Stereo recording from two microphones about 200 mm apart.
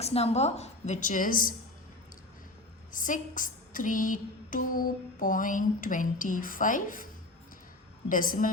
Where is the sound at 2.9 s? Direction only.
40° left (ahead or behind).